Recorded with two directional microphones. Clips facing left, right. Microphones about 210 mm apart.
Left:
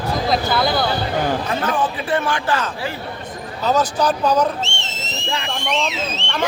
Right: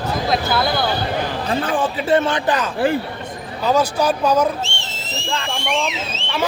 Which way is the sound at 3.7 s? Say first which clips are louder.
Right 1 dB; 10° right (ahead or behind).